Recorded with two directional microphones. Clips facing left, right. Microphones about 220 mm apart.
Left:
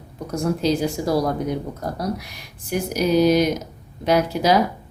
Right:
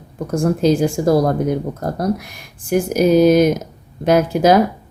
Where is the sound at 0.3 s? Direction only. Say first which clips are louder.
Right 6 dB; 50° right (ahead or behind).